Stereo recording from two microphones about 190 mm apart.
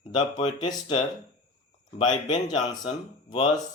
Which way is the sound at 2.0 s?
25° left (ahead or behind).